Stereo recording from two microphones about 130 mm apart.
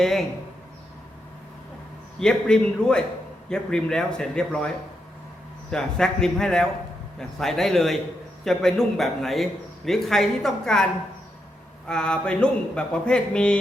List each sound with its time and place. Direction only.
0.0 s speech: centre (ahead or behind)
2.1 s a man's voice: 5° left (ahead or behind)
5.7 s a man's voice: 5° left (ahead or behind)
11.9 s speech: 5° left (ahead or behind)